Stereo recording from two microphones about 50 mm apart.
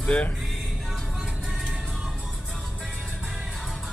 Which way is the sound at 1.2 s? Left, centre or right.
Centre.